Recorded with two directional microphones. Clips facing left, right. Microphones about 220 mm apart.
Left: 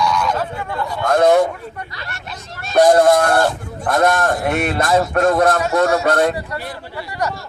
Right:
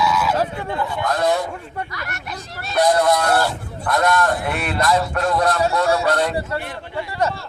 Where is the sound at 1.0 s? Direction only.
50° left (ahead or behind).